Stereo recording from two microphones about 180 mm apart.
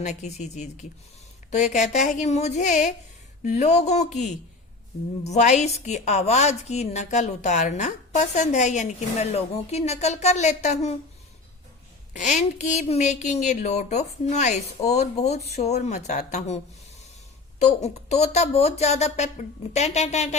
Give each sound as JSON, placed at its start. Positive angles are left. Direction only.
{"t": 0.0, "sound": "a woman's voice", "side_deg": 40}
{"t": 12.1, "sound": "a woman's voice", "side_deg": 40}
{"t": 17.8, "sound": "a woman's voice", "side_deg": 35}